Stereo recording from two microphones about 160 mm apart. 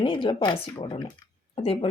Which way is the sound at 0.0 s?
30° left (ahead or behind).